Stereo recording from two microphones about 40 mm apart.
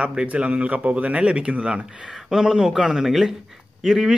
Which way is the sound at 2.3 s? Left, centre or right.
Centre.